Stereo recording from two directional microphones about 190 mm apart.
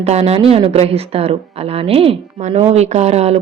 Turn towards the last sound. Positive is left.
turn(degrees=-35)  # may be behind; listen again after turning